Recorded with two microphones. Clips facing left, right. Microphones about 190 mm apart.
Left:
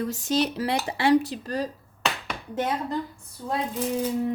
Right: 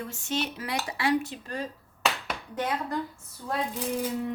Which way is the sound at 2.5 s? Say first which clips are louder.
Left 3 dB; 25° left (ahead or behind).